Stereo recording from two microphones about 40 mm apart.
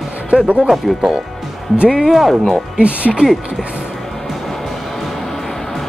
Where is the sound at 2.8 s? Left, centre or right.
Right.